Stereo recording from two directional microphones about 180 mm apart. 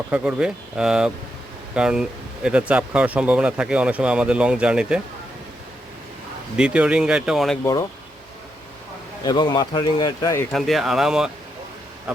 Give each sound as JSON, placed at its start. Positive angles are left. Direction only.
{"t": 0.1, "sound": "speech", "side_deg": -5}
{"t": 6.6, "sound": "speech", "side_deg": -5}
{"t": 7.6, "sound": "speech", "side_deg": 15}
{"t": 9.2, "sound": "a man's voice", "side_deg": 25}
{"t": 10.5, "sound": "speech", "side_deg": 0}